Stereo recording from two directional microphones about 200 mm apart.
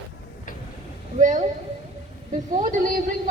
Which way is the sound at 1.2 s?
40° right (ahead or behind).